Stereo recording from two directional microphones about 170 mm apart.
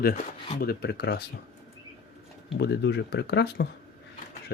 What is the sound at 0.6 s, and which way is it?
Speech, 65° left (ahead or behind).